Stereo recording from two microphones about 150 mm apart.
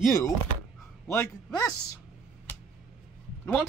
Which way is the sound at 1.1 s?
20° left (ahead or behind).